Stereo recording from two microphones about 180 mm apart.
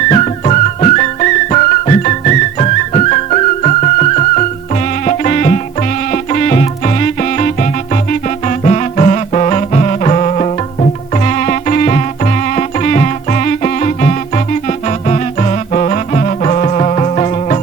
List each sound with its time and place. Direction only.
0.1 s music: 40° left (ahead or behind)